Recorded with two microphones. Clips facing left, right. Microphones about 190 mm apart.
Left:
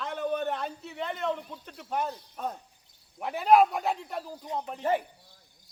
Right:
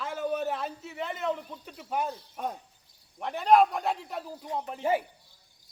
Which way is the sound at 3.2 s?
5° left (ahead or behind).